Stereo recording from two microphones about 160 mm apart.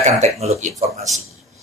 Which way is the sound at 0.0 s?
45° right (ahead or behind).